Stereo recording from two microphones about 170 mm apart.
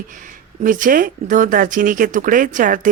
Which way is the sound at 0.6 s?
50° right (ahead or behind).